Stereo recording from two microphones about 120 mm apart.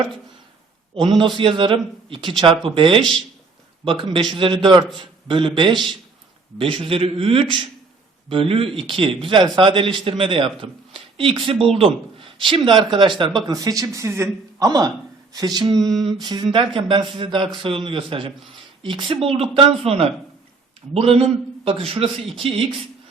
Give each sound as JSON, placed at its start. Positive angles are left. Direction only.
{"t": 1.2, "sound": "speech", "side_deg": -45}
{"t": 13.6, "sound": "speech", "side_deg": -30}